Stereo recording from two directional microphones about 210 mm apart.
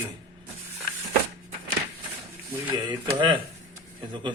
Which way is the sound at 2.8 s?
20° right (ahead or behind).